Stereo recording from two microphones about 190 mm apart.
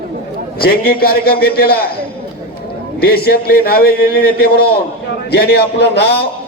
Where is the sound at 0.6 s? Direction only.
55° left (ahead or behind).